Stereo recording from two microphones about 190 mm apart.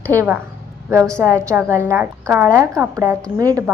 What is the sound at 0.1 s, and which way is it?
A woman's voice, 15° right (ahead or behind).